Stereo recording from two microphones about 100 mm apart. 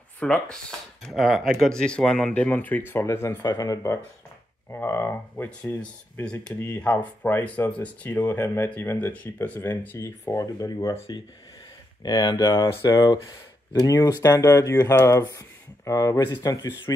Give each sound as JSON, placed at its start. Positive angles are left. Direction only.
{"t": 0.2, "sound": "speech", "side_deg": 10}
{"t": 3.4, "sound": "speech", "side_deg": 40}
{"t": 12.0, "sound": "speech", "side_deg": 45}